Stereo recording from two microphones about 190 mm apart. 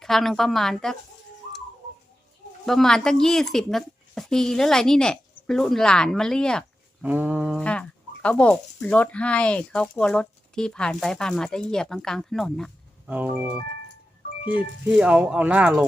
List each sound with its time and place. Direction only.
0.0 s speech: centre (ahead or behind)
2.6 s speech: centre (ahead or behind)
7.0 s speech: 10° right (ahead or behind)
7.6 s speech: 5° left (ahead or behind)
13.1 s speech: 10° right (ahead or behind)
14.8 s speech: 5° right (ahead or behind)